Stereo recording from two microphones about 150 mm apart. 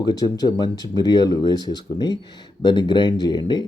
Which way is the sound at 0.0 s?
30° left (ahead or behind).